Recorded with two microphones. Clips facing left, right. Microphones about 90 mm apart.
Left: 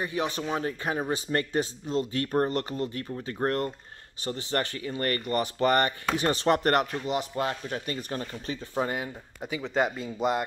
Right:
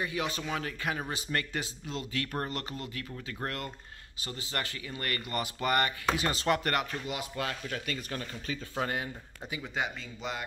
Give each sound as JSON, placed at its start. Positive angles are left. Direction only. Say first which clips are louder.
{"t": 0.0, "sound": "speech", "louder": "left 4 dB", "side_deg": 30}
{"t": 8.5, "sound": "speech", "louder": "left 4 dB", "side_deg": 20}
{"t": 9.8, "sound": "speech", "louder": "left 9 dB", "side_deg": 50}